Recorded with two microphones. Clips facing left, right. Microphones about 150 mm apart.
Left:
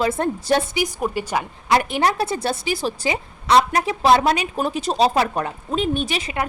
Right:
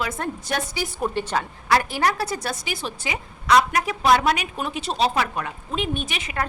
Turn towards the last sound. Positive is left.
turn(degrees=35)  # may be behind; listen again after turning